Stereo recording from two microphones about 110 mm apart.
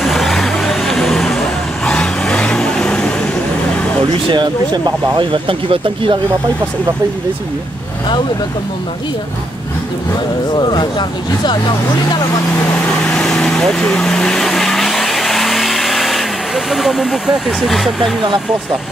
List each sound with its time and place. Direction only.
0.0 s vehicle: centre (ahead or behind)
4.3 s speech: 45° right (ahead or behind)
10.5 s speech: 40° left (ahead or behind)
13.1 s vehicle: 5° left (ahead or behind)